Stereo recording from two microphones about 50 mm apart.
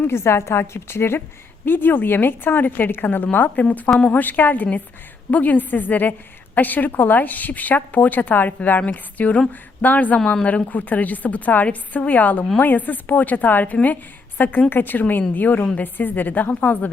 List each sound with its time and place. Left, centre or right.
0.0 s a woman's voice: left
1.6 s a woman's voice: left
3.8 s a woman's voice: centre
4.1 s a woman's voice: left